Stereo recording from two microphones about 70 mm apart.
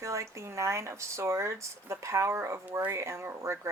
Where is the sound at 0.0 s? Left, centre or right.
Right.